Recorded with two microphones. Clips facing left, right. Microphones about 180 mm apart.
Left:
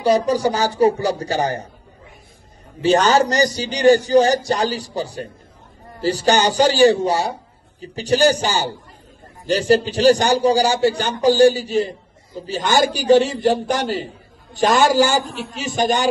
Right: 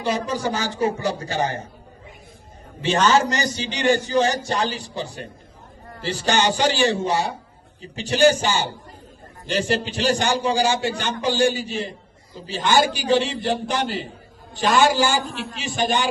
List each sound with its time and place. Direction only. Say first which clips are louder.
0.3 s a man's voice: left 6 dB; 35° left (ahead or behind)
2.8 s a man's voice: left 4 dB; 35° left (ahead or behind)